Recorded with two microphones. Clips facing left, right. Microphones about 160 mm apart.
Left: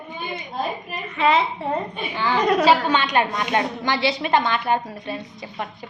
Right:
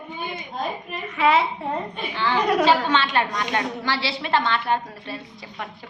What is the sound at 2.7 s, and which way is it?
A woman's voice, 10° left (ahead or behind).